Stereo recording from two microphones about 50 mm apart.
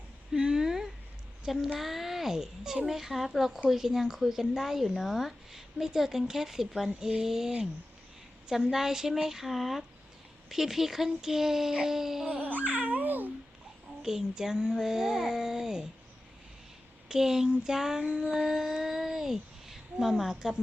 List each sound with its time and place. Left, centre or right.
0.3 s a sound: centre
1.5 s speech: centre
12.4 s babbling: right
14.0 s speech: centre
17.1 s speech: centre
18.3 s a sound: centre
20.3 s speech: centre